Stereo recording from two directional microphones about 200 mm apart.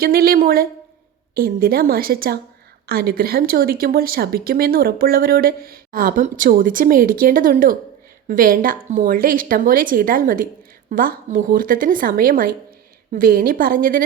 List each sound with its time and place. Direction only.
0.0 s speech: 50° right (ahead or behind)